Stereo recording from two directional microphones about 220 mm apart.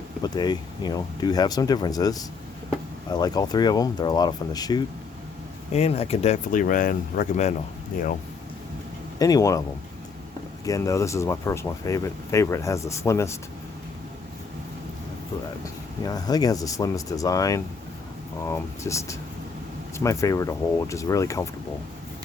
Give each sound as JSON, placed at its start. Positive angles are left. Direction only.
{"t": 0.2, "sound": "speech", "side_deg": 20}
{"t": 5.7, "sound": "speech", "side_deg": 30}
{"t": 9.1, "sound": "speech", "side_deg": 15}
{"t": 10.7, "sound": "speech", "side_deg": 15}
{"t": 15.6, "sound": "speech", "side_deg": 15}